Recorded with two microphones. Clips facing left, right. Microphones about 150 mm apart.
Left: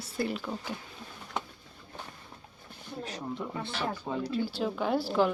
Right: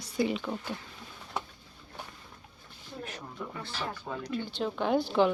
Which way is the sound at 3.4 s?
20° left (ahead or behind).